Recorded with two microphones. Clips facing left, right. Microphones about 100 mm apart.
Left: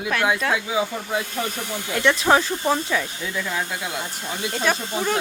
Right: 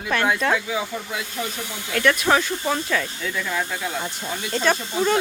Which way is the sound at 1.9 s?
20° left (ahead or behind).